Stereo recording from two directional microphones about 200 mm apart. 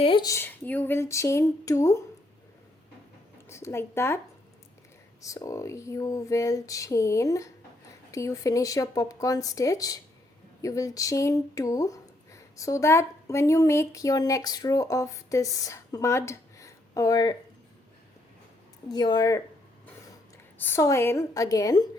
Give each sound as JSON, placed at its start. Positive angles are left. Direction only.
{"t": 0.0, "sound": "speech", "side_deg": 25}
{"t": 3.5, "sound": "speech", "side_deg": 15}
{"t": 5.2, "sound": "speech", "side_deg": 15}
{"t": 18.9, "sound": "speech", "side_deg": 20}
{"t": 20.6, "sound": "speech", "side_deg": 10}